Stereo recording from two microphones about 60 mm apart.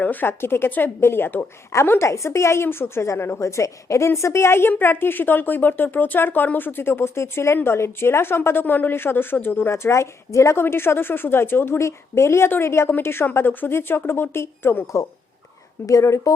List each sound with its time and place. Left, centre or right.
0.0 s speech: left
1.7 s a woman's voice: left
10.6 s speech: left
11.8 s a woman's voice: left
15.9 s speech: left